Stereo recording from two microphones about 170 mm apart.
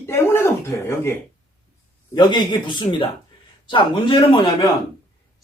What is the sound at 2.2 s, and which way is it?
A man's voice, 25° left (ahead or behind).